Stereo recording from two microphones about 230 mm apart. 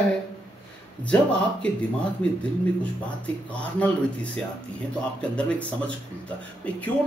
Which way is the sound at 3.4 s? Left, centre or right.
Centre.